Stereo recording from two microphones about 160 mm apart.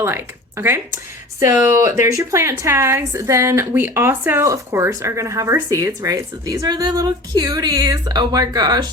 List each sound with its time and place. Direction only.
0.0 s a woman's voice: 15° right (ahead or behind)